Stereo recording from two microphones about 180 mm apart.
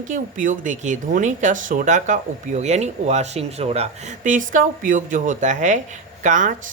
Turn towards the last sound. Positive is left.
turn(degrees=-45)  # may be behind; listen again after turning